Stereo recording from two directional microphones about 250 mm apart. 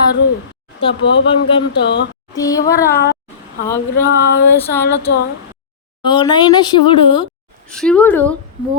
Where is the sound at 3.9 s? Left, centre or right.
Left.